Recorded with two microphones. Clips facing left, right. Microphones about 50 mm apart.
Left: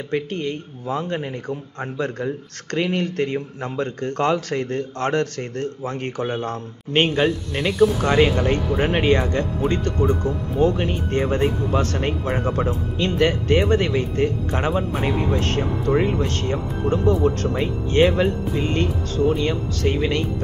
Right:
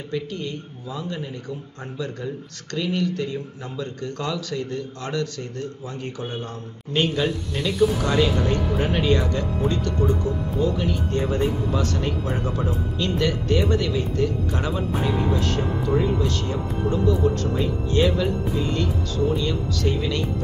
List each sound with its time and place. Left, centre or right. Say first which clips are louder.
0.1 s a man's voice: left 4 dB; left